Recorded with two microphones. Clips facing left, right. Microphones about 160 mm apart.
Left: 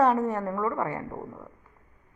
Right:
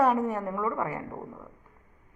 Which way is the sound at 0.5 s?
30° left (ahead or behind).